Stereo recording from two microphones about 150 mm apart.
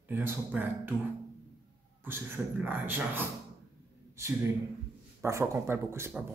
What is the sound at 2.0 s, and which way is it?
Speech, 15° right (ahead or behind).